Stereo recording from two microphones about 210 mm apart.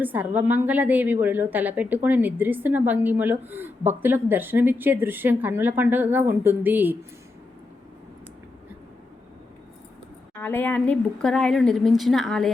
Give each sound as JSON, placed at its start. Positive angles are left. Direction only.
{"t": 0.0, "sound": "a woman's voice", "side_deg": -10}
{"t": 10.3, "sound": "speech", "side_deg": 10}